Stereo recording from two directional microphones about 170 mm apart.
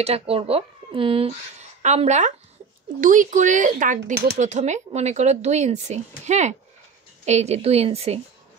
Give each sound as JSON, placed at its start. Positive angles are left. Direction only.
{"t": 0.0, "sound": "a woman's voice", "side_deg": -35}